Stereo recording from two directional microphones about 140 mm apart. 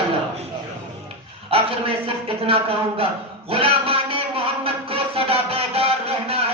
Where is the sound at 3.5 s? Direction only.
40° right (ahead or behind).